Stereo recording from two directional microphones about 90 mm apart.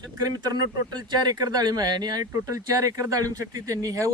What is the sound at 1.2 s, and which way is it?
Speech, 45° right (ahead or behind).